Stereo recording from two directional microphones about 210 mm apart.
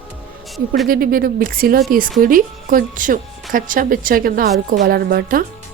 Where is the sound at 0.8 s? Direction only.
45° right (ahead or behind).